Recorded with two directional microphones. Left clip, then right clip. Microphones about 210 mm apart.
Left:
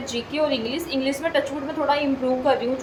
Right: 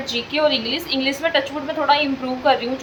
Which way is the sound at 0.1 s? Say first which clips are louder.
Right 5 dB; 5° right (ahead or behind).